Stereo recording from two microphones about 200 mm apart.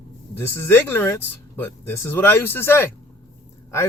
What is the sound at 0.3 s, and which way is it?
Speech, 15° left (ahead or behind).